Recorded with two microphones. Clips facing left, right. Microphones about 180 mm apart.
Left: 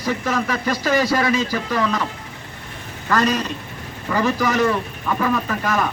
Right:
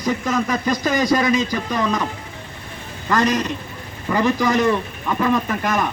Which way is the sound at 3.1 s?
15° right (ahead or behind).